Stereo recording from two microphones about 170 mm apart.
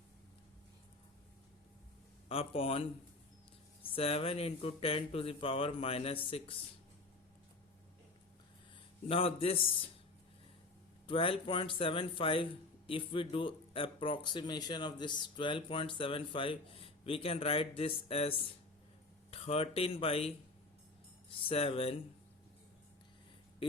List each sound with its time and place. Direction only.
2.3 s speech: 35° left (ahead or behind)
3.9 s speech: 35° left (ahead or behind)
9.0 s speech: 35° left (ahead or behind)
11.0 s speech: 30° left (ahead or behind)